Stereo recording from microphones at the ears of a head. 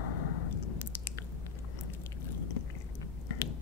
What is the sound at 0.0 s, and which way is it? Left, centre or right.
Chewing, left.